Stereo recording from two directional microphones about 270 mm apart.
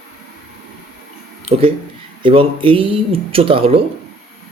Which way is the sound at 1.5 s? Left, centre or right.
Right.